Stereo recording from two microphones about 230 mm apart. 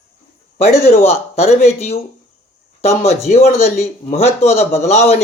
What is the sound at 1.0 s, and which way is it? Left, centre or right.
Speech, left.